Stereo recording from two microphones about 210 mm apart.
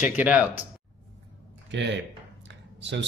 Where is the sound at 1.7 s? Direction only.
55° right (ahead or behind).